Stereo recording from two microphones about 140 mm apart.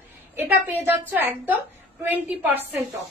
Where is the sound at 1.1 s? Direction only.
15° right (ahead or behind).